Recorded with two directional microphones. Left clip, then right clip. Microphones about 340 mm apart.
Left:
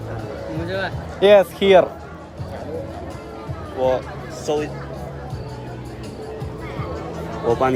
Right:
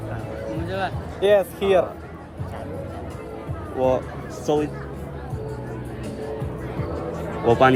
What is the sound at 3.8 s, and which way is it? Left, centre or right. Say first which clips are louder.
Speech: left 1 dB; right.